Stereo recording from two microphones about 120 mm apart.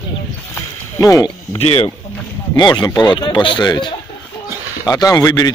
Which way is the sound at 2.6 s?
35° left (ahead or behind).